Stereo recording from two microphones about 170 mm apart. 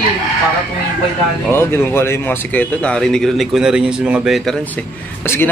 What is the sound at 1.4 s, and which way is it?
Speech, 15° left (ahead or behind).